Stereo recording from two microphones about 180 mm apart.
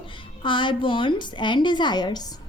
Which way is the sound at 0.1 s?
25° left (ahead or behind).